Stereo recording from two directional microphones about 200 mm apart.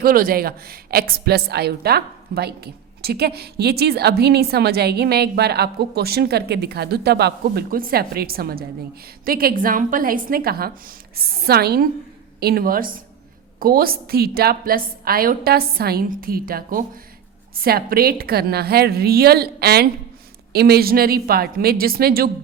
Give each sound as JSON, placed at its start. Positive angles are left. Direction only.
{"t": 0.0, "sound": "speech", "side_deg": -45}